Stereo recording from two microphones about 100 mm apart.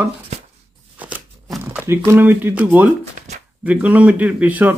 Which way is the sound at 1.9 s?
25° right (ahead or behind).